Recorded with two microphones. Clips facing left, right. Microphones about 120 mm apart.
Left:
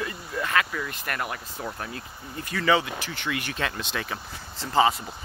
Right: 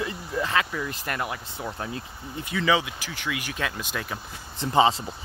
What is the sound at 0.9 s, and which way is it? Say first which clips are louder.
Speech: right 1 dB; 30° right (ahead or behind).